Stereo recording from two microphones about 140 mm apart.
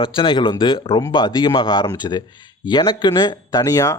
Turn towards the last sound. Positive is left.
turn(degrees=25)  # may be behind; listen again after turning